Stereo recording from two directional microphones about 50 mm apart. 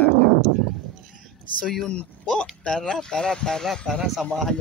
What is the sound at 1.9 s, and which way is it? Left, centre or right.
Speech, centre.